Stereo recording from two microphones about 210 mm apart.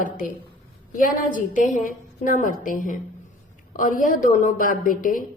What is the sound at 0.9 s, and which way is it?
A woman's voice, 40° left (ahead or behind).